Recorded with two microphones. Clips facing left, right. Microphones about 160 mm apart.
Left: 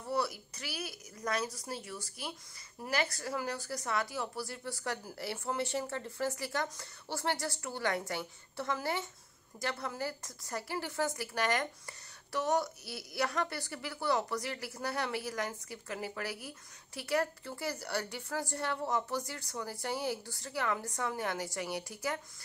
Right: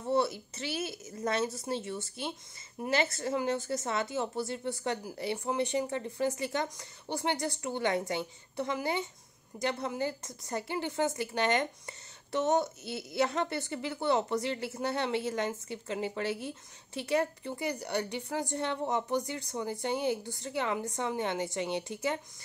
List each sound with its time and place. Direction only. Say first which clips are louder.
0.0 s a woman's voice: right 5 dB; 25° right (ahead or behind)